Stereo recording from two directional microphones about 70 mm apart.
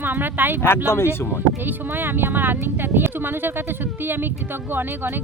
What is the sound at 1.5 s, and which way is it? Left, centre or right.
Speech, right.